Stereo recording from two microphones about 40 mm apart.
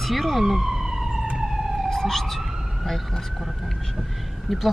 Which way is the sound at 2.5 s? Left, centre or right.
Centre.